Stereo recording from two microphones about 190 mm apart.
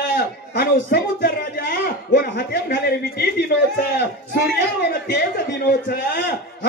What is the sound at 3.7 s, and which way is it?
A man's voice, 60° left (ahead or behind).